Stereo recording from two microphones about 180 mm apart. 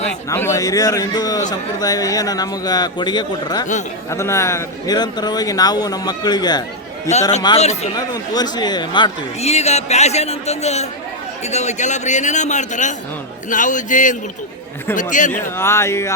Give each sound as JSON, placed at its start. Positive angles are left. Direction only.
{"t": 0.3, "sound": "speech", "side_deg": 15}
{"t": 7.4, "sound": "speech", "side_deg": 35}
{"t": 7.9, "sound": "speech", "side_deg": 20}
{"t": 9.4, "sound": "speech", "side_deg": 35}
{"t": 15.3, "sound": "speech", "side_deg": 15}